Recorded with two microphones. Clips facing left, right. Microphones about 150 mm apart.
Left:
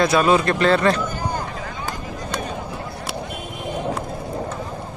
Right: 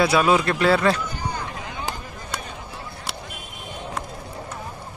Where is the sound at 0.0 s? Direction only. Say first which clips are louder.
Left 2 dB; 5° right (ahead or behind).